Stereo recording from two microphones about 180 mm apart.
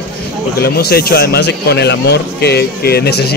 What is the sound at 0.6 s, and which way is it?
Speech, 60° left (ahead or behind).